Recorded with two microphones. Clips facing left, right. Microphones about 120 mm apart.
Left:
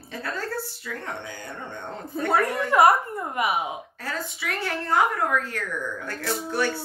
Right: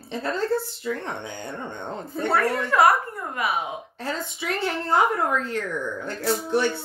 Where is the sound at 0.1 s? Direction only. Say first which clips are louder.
Right 6 dB; 25° right (ahead or behind).